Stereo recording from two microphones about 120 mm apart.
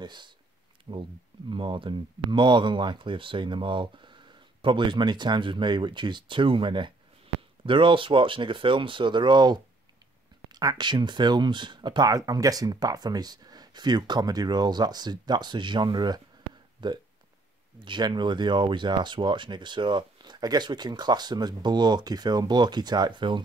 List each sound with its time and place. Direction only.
0.0 s speech: 40° right (ahead or behind)